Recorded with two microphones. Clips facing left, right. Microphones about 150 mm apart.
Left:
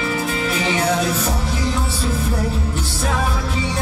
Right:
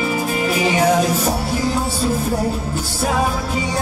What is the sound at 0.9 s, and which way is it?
Music, 45° right (ahead or behind).